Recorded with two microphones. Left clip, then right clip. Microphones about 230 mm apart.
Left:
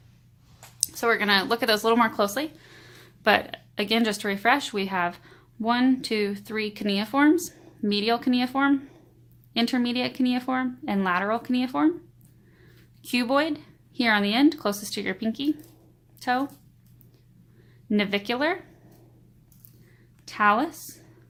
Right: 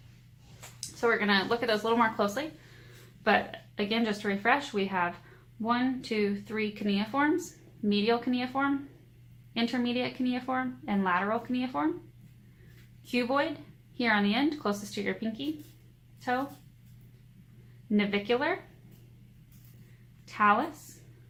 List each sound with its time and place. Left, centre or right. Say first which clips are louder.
0.8 s a woman's voice: left 4 dB; left
13.1 s a woman's voice: left 5 dB; left
17.9 s a woman's voice: left 2 dB; left
20.2 s a woman's voice: left 4 dB; left